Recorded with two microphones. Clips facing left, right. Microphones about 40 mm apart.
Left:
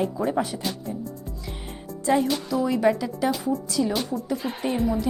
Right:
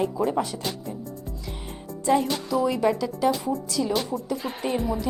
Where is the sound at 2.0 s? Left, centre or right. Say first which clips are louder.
Even; centre.